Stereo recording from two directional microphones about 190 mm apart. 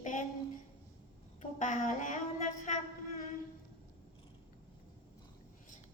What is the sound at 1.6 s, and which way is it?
Speech, 40° left (ahead or behind).